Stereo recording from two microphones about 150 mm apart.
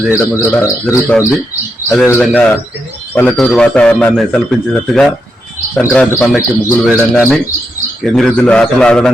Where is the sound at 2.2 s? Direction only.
10° left (ahead or behind).